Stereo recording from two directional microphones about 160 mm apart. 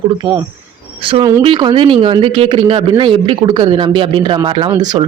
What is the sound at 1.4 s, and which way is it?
Speech, 30° right (ahead or behind).